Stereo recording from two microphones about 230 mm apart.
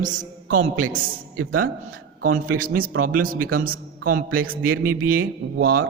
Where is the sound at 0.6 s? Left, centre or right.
Right.